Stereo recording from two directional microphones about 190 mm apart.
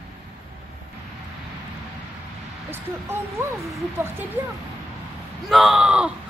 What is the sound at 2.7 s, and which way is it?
Speech, 15° right (ahead or behind).